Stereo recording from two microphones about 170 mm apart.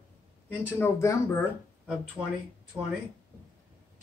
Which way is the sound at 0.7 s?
15° left (ahead or behind).